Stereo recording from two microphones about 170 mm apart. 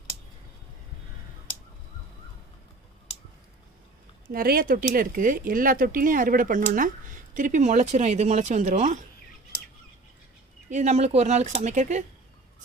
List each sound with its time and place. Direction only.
4.3 s speech: 60° right (ahead or behind); by 9.0 s 45° right (ahead or behind)
10.7 s speech: 40° right (ahead or behind)